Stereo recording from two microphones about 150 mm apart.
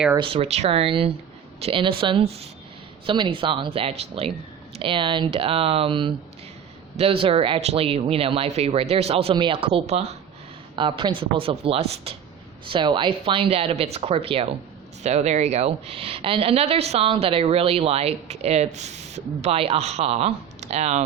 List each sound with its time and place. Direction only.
0.2 s speech: 40° right (ahead or behind)
9.3 s speech: 35° right (ahead or behind)
10.8 s a woman's voice: 35° right (ahead or behind); by 21.0 s 50° right (ahead or behind)